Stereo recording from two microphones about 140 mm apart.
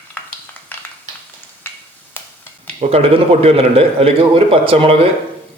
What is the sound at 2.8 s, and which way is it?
A man's voice, 45° right (ahead or behind).